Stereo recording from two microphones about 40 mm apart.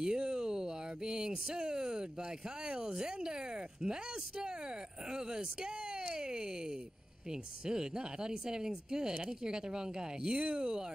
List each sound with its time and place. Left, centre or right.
0.0 s speech: centre